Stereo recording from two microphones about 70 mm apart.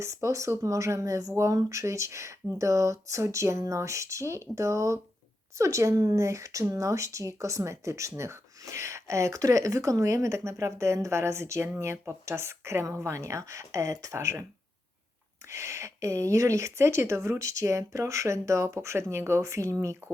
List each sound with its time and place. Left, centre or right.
0.0 s speech: right
15.4 s speech: right